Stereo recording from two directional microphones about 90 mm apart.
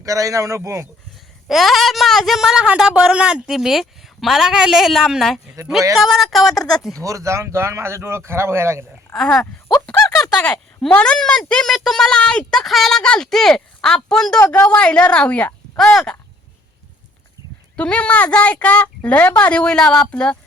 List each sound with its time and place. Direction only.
0.0 s speech: 40° right (ahead or behind)
1.5 s speech: centre (ahead or behind)
7.0 s speech: 35° right (ahead or behind)
9.1 s speech: 5° left (ahead or behind)
9.8 s a sound: 5° left (ahead or behind)
10.9 s speech: 15° left (ahead or behind)
14.5 s speech: 30° left (ahead or behind)
14.8 s speech: 10° left (ahead or behind)
17.7 s speech: 10° left (ahead or behind)